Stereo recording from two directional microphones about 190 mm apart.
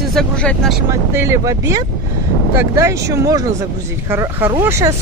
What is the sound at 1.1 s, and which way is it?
Speech, 15° right (ahead or behind).